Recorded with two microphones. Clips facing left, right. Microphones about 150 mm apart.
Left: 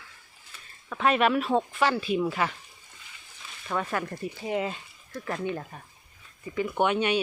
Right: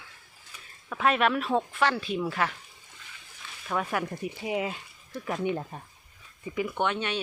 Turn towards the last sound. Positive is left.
turn(degrees=10)  # may be behind; listen again after turning